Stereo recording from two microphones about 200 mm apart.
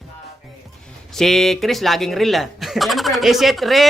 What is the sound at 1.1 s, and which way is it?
Speech, centre (ahead or behind).